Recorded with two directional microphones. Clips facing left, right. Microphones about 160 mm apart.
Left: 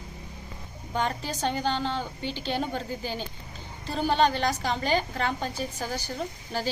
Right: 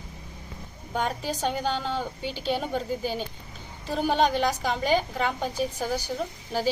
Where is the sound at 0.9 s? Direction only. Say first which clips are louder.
Right 1 dB; 5° right (ahead or behind).